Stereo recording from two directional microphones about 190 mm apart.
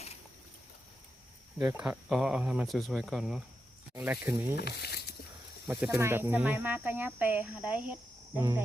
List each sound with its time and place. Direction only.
1.5 s speech: 5° right (ahead or behind)
4.5 s speech: 55° left (ahead or behind)
5.6 s speech: 15° right (ahead or behind)